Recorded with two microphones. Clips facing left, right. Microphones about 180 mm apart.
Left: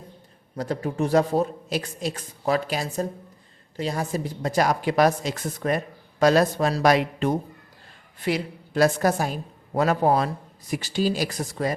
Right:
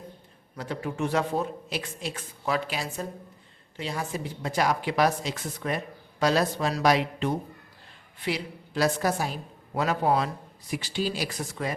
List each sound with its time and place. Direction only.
0.5 s a man's voice: 40° left (ahead or behind)